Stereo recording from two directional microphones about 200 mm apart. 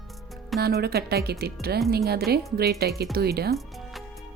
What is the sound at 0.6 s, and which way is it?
Speech, 50° right (ahead or behind).